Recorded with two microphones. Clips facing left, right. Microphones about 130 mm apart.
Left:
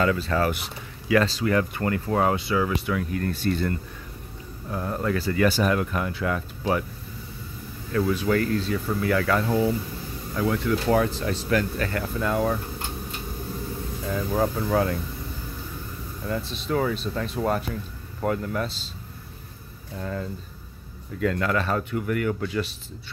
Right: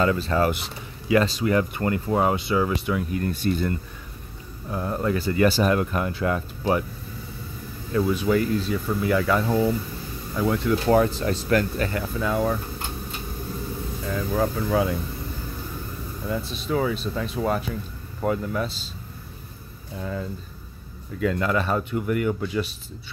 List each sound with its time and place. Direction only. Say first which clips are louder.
0.0 s speech: right 2 dB; 25° right (ahead or behind)
7.9 s speech: right 1 dB; 15° right (ahead or behind)
10.4 s speech: right 2 dB; 25° right (ahead or behind)
12.0 s speech: left 1 dB; centre (ahead or behind)
14.0 s speech: even; 5° left (ahead or behind)
16.3 s speech: right 1 dB; 10° right (ahead or behind)
20.0 s speech: right 1 dB; 5° right (ahead or behind)